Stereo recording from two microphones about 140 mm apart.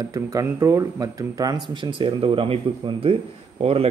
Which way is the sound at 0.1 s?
25° right (ahead or behind).